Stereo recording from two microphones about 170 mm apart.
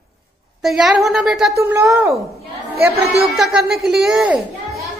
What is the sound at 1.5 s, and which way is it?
Speech, 15° right (ahead or behind).